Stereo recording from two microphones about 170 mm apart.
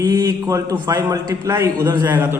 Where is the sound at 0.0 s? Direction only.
20° right (ahead or behind).